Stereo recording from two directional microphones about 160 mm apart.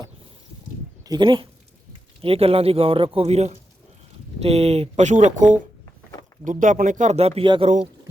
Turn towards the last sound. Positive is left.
turn(degrees=-35)  # may be behind; listen again after turning